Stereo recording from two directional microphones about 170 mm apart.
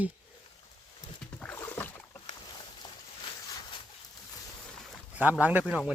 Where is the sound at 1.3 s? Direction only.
10° left (ahead or behind).